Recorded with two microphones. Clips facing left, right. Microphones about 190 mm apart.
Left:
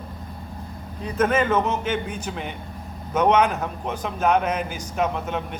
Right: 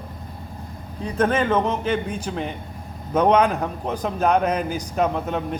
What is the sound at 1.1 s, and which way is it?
A man's voice, 30° right (ahead or behind).